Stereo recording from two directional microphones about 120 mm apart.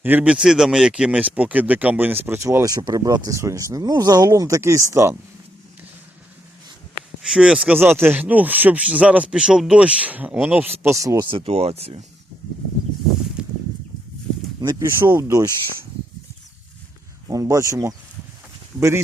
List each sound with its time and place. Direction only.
0.0 s a man's voice: 15° right (ahead or behind)
7.2 s speech: 5° right (ahead or behind); by 11.3 s 25° right (ahead or behind)
11.3 s speech: 55° right (ahead or behind)
13.4 s a sound: 5° right (ahead or behind)
14.6 s speech: 35° right (ahead or behind)
14.8 s a man's voice: 20° right (ahead or behind)
15.3 s a man's voice: 30° right (ahead or behind)
17.2 s a man's voice: 30° right (ahead or behind)